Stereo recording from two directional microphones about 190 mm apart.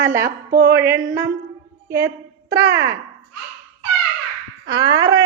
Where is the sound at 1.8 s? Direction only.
15° right (ahead or behind).